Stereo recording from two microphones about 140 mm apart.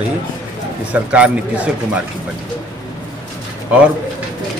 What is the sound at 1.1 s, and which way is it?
Speech, 10° right (ahead or behind).